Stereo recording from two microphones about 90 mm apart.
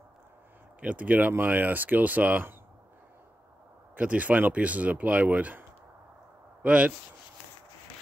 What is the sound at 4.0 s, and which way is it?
Speech, 15° right (ahead or behind).